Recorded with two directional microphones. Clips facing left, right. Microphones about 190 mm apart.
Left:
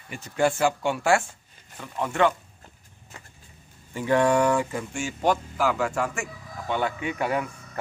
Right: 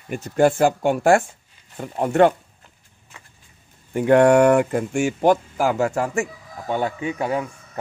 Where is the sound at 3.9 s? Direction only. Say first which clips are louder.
Right 7 dB; 60° right (ahead or behind).